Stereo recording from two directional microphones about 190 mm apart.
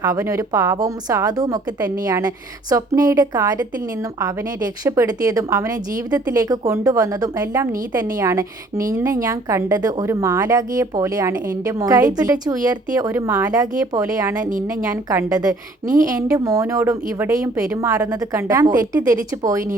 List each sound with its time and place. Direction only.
0.0 s a woman's voice: 15° right (ahead or behind)